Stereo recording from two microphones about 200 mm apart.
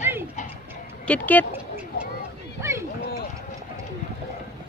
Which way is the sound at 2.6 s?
15° right (ahead or behind).